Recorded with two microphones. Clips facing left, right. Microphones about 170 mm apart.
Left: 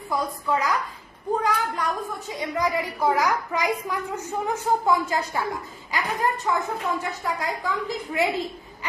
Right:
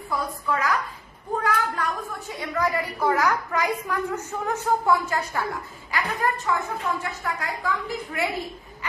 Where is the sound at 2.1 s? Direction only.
20° left (ahead or behind).